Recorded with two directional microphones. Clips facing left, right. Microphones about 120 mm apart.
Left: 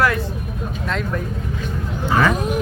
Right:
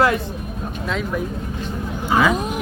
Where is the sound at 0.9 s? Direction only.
5° right (ahead or behind).